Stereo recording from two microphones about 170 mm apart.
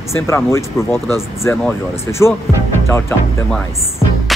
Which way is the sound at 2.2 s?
15° left (ahead or behind).